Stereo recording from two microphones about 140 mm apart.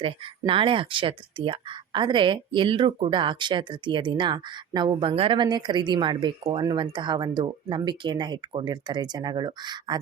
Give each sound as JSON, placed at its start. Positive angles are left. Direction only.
{"t": 0.0, "sound": "speech", "side_deg": -40}